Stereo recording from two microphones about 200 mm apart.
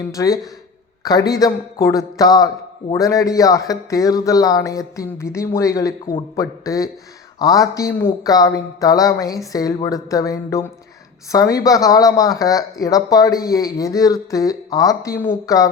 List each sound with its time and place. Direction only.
0.1 s speech: 15° left (ahead or behind)